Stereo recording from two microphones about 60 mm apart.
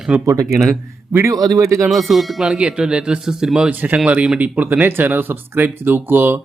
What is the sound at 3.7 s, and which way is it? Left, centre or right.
Speech, right.